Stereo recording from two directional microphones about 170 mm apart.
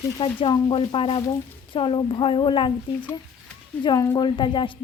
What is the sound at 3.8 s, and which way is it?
Speech, 25° left (ahead or behind).